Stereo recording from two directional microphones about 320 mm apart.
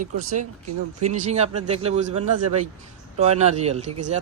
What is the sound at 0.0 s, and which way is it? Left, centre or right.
Speech, right.